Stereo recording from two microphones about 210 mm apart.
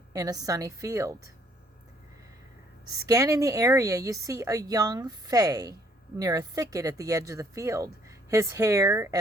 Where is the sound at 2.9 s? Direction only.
15° right (ahead or behind).